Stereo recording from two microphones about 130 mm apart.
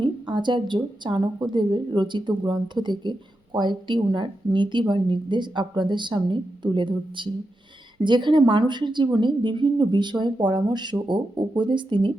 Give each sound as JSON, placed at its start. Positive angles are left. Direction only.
{"t": 0.0, "sound": "a woman's voice", "side_deg": -35}